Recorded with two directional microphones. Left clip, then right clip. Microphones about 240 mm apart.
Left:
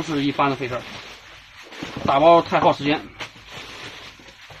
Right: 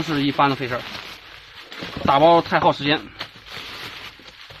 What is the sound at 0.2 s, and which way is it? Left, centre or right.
Speech, right.